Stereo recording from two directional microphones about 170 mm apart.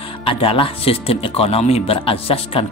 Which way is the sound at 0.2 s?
30° left (ahead or behind).